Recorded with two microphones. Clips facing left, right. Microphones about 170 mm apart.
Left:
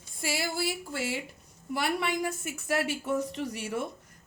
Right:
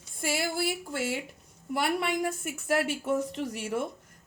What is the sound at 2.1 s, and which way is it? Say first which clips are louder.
Speech: right 1 dB; 60° right (ahead or behind).